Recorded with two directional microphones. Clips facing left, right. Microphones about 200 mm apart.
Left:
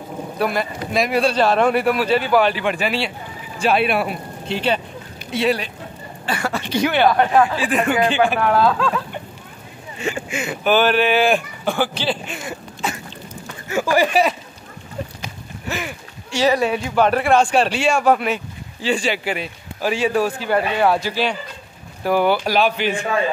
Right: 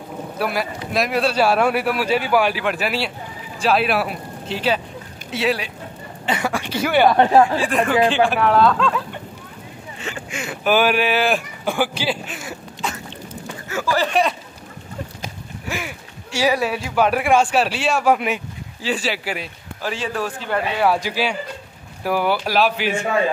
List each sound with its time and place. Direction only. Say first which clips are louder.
0.4 s a man's voice: left 2 dB; 5° right (ahead or behind)
6.2 s speech: right 1 dB; 15° right (ahead or behind)
7.2 s speech: right 2 dB; 30° right (ahead or behind)
7.6 s a man's voice: right 1 dB; centre (ahead or behind)
13.7 s speech: left 4 dB; 15° left (ahead or behind)
15.7 s a man's voice: left 2 dB; 10° right (ahead or behind)
19.8 s speech: left 6 dB; 10° left (ahead or behind)
20.8 s a man's voice: left 1 dB; 10° right (ahead or behind)